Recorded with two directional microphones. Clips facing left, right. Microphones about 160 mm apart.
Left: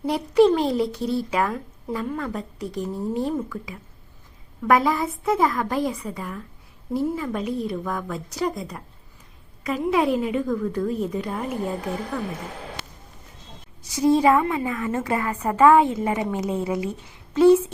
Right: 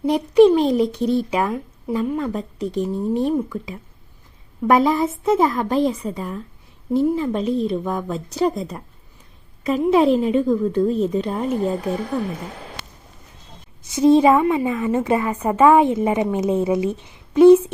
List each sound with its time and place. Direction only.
0.0 s a woman's voice: 20° right (ahead or behind)
13.8 s a woman's voice: 20° right (ahead or behind)